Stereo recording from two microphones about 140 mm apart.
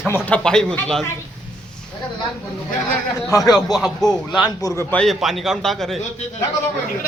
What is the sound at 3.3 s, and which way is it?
Speech, 25° left (ahead or behind).